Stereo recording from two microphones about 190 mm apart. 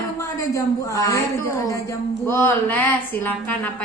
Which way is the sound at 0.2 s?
15° left (ahead or behind).